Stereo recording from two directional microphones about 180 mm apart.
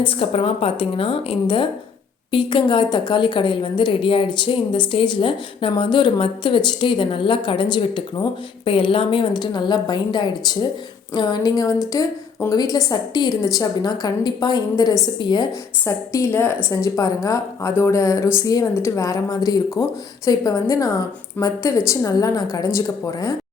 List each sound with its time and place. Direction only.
0.1 s a woman's voice: 30° left (ahead or behind)